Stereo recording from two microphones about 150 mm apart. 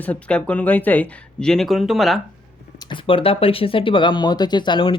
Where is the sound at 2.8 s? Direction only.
35° left (ahead or behind).